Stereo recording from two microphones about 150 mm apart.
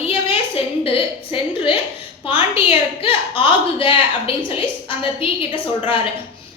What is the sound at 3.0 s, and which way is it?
A woman's voice, 35° left (ahead or behind).